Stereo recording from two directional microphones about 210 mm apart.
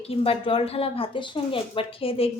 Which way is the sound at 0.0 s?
30° left (ahead or behind).